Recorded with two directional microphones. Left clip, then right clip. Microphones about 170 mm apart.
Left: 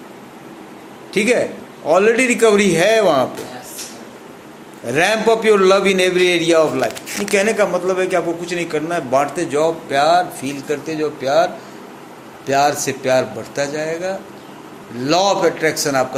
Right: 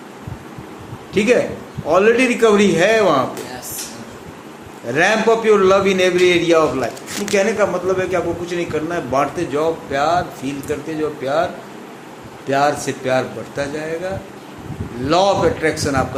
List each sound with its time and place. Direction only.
1.1 s a man's voice: 40° left (ahead or behind)
4.9 s a man's voice: 40° left (ahead or behind)
12.5 s a man's voice: 40° left (ahead or behind)